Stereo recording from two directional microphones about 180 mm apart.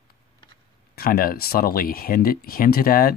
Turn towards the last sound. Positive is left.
turn(degrees=55)  # may be behind; listen again after turning